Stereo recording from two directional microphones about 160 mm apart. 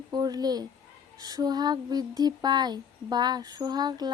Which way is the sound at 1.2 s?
25° right (ahead or behind).